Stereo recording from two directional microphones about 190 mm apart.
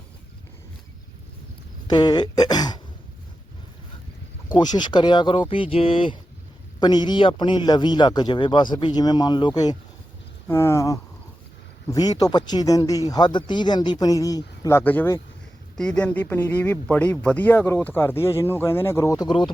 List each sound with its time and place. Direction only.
1.9 s speech: 20° left (ahead or behind)
4.5 s speech: 20° left (ahead or behind)